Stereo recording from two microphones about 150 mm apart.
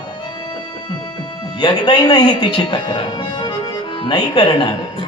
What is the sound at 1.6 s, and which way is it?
A man's voice, 30° left (ahead or behind).